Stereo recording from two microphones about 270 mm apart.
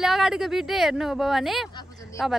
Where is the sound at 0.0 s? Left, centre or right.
Centre.